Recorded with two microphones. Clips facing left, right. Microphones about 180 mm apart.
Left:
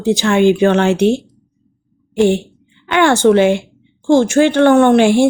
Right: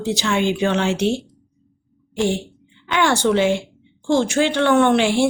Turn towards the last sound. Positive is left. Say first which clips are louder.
# left 6 dB
turn(degrees=50)  # may be behind; listen again after turning